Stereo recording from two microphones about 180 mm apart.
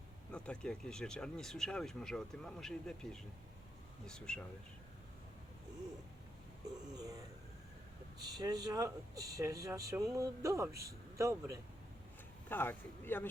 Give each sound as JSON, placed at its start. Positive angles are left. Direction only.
{"t": 0.3, "sound": "speech", "side_deg": 5}
{"t": 6.9, "sound": "a sound", "side_deg": -20}
{"t": 8.2, "sound": "speech", "side_deg": -20}
{"t": 12.5, "sound": "speech", "side_deg": 10}